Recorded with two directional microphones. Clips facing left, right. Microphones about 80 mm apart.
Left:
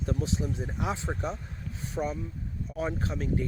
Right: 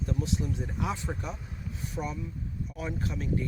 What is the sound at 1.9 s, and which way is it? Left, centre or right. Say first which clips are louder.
Speech: left 4 dB; left.